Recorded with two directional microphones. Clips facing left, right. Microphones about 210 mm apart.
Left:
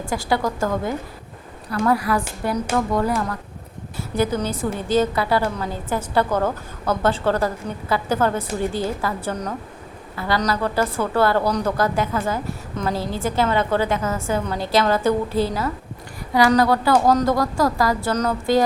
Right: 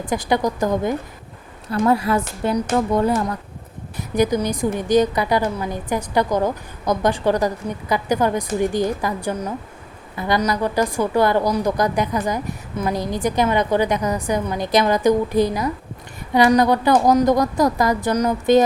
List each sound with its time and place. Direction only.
0.0 s a woman's voice: 20° right (ahead or behind)